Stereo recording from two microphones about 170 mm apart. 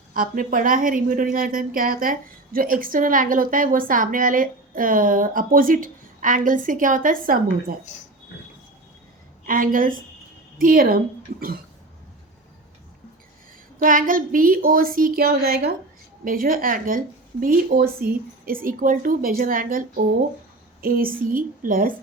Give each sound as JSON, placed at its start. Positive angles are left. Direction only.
{"t": 0.1, "sound": "a woman's voice", "side_deg": -55}
{"t": 9.5, "sound": "speech", "side_deg": -55}
{"t": 13.7, "sound": "speech", "side_deg": -55}
{"t": 20.8, "sound": "speech", "side_deg": -55}